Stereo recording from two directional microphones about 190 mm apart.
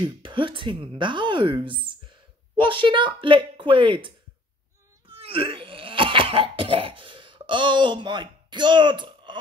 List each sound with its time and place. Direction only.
0.0 s speech: 25° right (ahead or behind)
5.0 s cough: 30° right (ahead or behind)